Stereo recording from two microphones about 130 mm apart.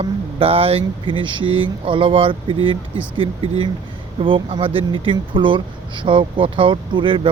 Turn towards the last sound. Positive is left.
turn(degrees=-40)  # may be behind; listen again after turning